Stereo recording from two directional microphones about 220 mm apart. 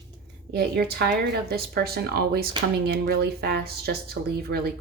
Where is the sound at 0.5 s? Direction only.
45° right (ahead or behind).